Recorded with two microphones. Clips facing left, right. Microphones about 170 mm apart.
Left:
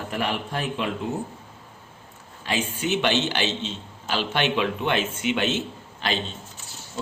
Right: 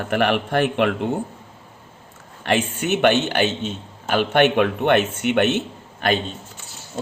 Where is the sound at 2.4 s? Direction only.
65° right (ahead or behind).